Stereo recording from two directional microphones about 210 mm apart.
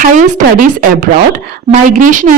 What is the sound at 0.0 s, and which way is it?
A woman's voice, 35° right (ahead or behind).